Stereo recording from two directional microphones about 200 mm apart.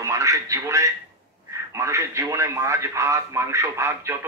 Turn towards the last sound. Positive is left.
turn(degrees=-15)  # may be behind; listen again after turning